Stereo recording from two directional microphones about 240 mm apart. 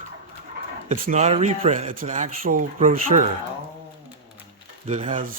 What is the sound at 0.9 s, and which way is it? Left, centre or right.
Speech, right.